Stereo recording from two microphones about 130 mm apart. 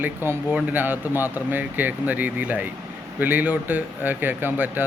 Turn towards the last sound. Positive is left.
turn(degrees=-15)  # may be behind; listen again after turning